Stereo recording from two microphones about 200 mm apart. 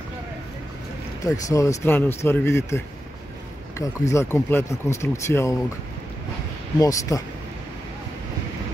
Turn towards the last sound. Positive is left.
turn(degrees=15)  # may be behind; listen again after turning